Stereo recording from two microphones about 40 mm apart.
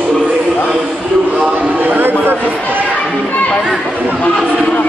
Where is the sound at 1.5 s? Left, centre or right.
Right.